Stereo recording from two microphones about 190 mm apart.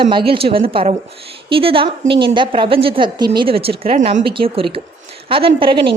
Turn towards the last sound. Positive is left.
turn(degrees=-25)  # may be behind; listen again after turning